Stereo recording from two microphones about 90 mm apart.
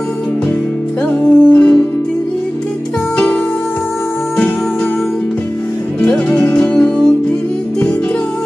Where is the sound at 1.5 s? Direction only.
15° left (ahead or behind).